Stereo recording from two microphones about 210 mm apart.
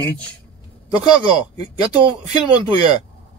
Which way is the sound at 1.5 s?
30° right (ahead or behind).